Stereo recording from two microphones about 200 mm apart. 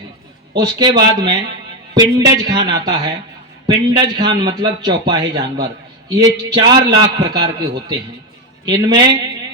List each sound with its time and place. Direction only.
0.5 s a man's voice: 20° right (ahead or behind)